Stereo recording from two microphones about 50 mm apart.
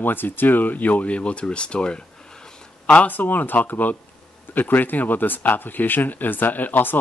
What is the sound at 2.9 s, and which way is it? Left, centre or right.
Speech, left.